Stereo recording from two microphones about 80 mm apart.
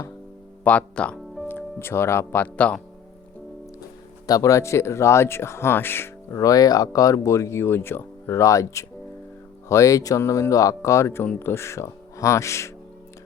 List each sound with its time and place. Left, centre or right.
0.6 s speech: centre
1.5 s speech: left
4.3 s speech: left
6.3 s speech: left